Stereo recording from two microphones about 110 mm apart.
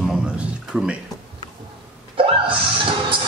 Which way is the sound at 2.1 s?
55° right (ahead or behind).